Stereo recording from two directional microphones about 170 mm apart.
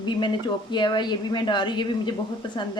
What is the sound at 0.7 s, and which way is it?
Speech, 25° left (ahead or behind).